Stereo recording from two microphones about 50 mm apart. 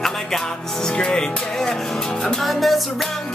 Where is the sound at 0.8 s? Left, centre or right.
Centre.